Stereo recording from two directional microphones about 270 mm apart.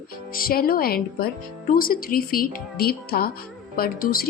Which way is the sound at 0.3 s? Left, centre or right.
Left.